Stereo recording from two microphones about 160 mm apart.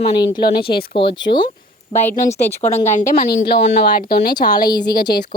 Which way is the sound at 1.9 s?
35° right (ahead or behind).